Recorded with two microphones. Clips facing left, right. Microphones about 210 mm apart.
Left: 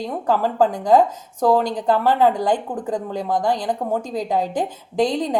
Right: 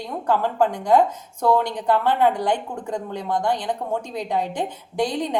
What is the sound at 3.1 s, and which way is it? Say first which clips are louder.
Speech: left 2 dB; 90° left.